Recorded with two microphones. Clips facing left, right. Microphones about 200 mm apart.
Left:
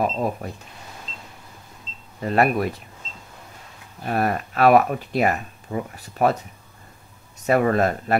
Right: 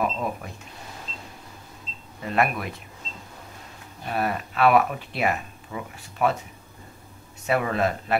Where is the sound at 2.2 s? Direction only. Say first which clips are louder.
Left 5 dB; 40° left (ahead or behind).